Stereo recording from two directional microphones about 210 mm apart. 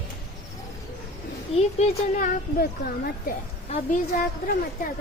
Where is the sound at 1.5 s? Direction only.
35° left (ahead or behind).